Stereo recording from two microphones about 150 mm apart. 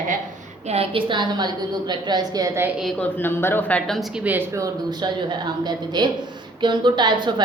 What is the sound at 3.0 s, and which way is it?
Speech, 15° left (ahead or behind).